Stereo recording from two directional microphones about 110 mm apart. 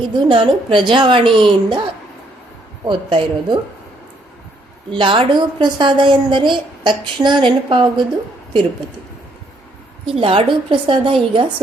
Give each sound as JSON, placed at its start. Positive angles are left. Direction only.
{"t": 0.0, "sound": "a woman's voice", "side_deg": -50}
{"t": 2.8, "sound": "a woman's voice", "side_deg": -50}
{"t": 4.9, "sound": "a woman's voice", "side_deg": -50}
{"t": 10.2, "sound": "a woman's voice", "side_deg": -55}